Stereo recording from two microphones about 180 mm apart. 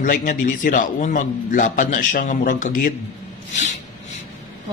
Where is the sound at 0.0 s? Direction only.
50° left (ahead or behind).